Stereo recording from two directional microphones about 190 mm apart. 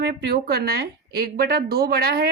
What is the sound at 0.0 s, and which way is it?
A woman's voice, 55° right (ahead or behind).